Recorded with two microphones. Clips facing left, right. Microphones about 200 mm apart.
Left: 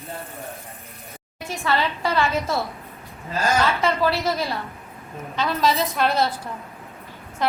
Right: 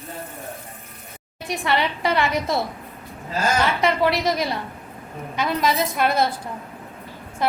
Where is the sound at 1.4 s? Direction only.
15° right (ahead or behind).